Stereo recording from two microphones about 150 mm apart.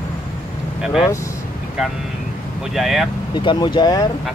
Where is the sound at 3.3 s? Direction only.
30° left (ahead or behind).